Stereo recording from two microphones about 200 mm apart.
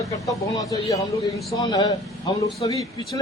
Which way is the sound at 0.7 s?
15° left (ahead or behind).